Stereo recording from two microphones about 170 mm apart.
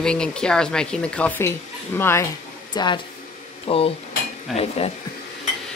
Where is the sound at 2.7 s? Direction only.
25° left (ahead or behind).